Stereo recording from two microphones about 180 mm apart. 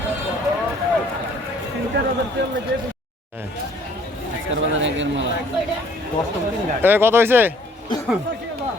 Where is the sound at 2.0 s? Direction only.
75° right (ahead or behind).